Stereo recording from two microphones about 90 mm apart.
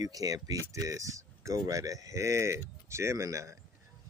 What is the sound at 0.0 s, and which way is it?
Speech, 40° right (ahead or behind).